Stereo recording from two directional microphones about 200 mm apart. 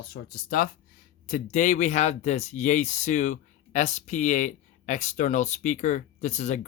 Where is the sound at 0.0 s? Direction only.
50° left (ahead or behind).